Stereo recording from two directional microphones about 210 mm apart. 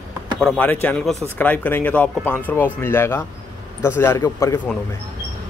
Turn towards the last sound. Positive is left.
turn(degrees=10)  # may be behind; listen again after turning